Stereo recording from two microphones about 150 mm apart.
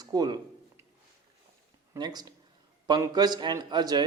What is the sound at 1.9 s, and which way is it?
Speech, 25° right (ahead or behind).